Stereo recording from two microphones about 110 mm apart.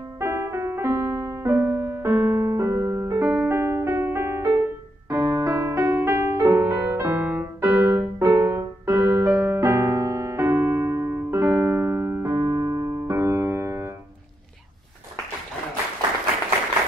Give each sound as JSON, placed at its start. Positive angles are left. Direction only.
{"t": 0.2, "sound": "music", "side_deg": -25}
{"t": 6.7, "sound": "music", "side_deg": -20}
{"t": 7.6, "sound": "music", "side_deg": -30}
{"t": 8.4, "sound": "music", "side_deg": -20}